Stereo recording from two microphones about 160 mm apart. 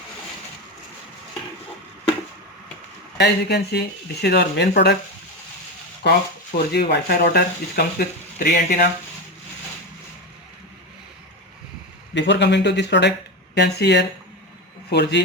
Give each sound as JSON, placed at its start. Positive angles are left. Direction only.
{"t": 3.2, "sound": "speech", "side_deg": 90}
{"t": 6.0, "sound": "speech", "side_deg": 90}
{"t": 6.7, "sound": "speech", "side_deg": 75}
{"t": 12.1, "sound": "a man's voice", "side_deg": 90}